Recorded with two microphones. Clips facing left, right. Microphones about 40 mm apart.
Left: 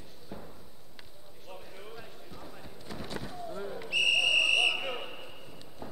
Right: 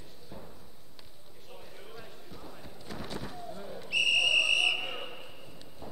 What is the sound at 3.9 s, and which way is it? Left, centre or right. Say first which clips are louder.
Whistle: even; centre.